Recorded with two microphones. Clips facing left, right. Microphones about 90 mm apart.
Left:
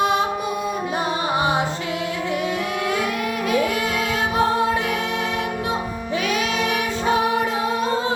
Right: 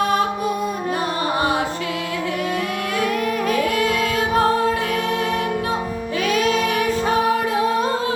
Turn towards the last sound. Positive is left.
turn(degrees=-40)  # may be behind; listen again after turning